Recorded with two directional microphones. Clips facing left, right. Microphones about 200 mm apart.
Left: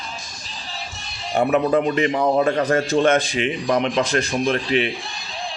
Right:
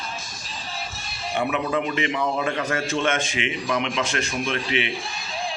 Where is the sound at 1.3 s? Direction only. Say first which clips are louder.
Left 7 dB; 40° left (ahead or behind).